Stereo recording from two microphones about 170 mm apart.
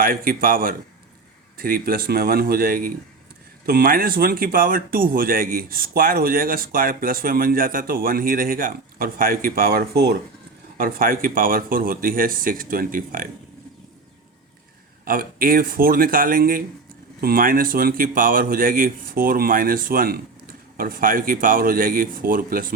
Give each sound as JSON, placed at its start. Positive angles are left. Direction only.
{"t": 0.0, "sound": "speech", "side_deg": -60}
{"t": 10.8, "sound": "speech", "side_deg": -60}
{"t": 15.0, "sound": "speech", "side_deg": -60}